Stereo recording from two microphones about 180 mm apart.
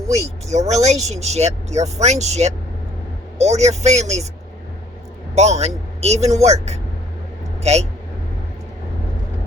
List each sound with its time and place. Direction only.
0.1 s speech: 40° right (ahead or behind)
5.3 s speech: 35° right (ahead or behind)